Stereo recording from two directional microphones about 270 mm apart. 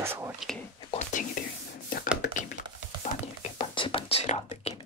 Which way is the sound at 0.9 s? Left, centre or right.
Left.